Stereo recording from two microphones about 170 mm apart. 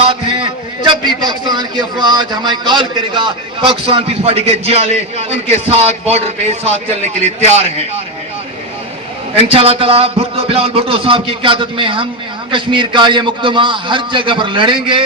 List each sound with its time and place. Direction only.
0.1 s a man's voice: 30° right (ahead or behind)
9.3 s a man's voice: 35° right (ahead or behind)